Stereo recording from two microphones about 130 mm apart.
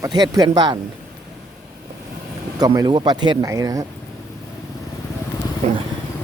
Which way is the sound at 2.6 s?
30° right (ahead or behind).